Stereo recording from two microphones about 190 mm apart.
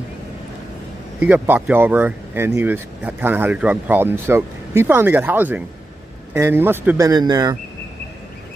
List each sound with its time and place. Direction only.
1.2 s speech: 10° right (ahead or behind)